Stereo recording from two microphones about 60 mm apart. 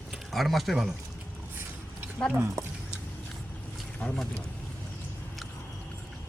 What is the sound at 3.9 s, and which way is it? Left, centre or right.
Boat, left.